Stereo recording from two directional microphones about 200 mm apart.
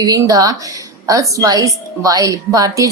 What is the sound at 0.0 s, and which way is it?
A woman's voice, 15° right (ahead or behind).